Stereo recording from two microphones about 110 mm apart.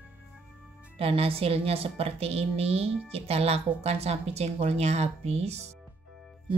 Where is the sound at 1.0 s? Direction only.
60° right (ahead or behind).